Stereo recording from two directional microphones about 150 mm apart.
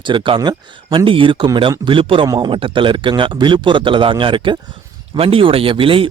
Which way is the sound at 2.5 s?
35° right (ahead or behind).